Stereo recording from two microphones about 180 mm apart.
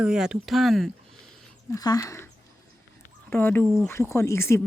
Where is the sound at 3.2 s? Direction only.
10° left (ahead or behind).